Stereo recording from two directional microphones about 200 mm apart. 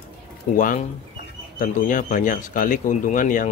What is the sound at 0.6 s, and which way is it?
Speech, 40° left (ahead or behind).